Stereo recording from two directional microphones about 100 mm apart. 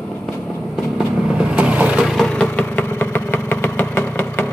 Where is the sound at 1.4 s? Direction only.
10° right (ahead or behind).